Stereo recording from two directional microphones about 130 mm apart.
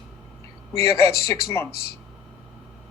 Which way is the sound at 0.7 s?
20° left (ahead or behind).